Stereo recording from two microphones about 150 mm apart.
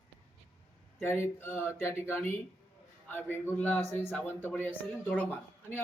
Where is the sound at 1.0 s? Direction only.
15° left (ahead or behind).